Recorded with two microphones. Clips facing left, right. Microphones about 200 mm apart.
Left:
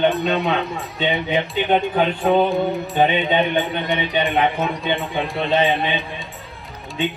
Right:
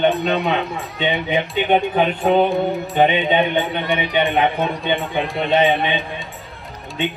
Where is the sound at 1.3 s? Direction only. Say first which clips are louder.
Right 2 dB; 20° right (ahead or behind).